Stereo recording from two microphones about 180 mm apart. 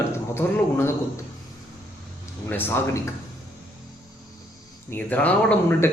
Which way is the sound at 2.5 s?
10° left (ahead or behind).